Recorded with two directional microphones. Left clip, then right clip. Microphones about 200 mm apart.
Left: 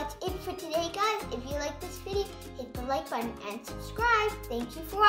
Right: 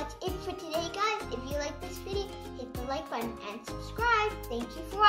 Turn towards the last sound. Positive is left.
turn(degrees=5)  # may be behind; listen again after turning